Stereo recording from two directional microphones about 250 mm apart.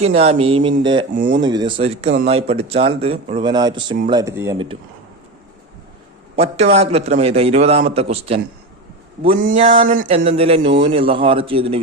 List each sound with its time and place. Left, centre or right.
0.0 s a man's voice: right
6.3 s a man's voice: right
9.6 s a man's voice: right